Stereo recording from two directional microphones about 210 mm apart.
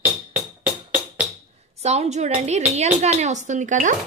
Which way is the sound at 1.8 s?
30° right (ahead or behind).